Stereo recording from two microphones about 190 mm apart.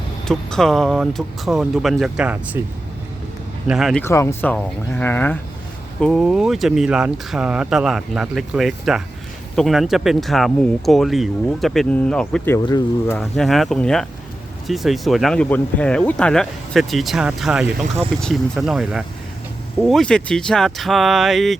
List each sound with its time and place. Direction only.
0.3 s speech: centre (ahead or behind)
3.7 s speech: centre (ahead or behind)
4.0 s speech: 15° left (ahead or behind)
6.0 s speech: centre (ahead or behind)
12.6 s speech: 20° left (ahead or behind)
13.1 s speech: centre (ahead or behind)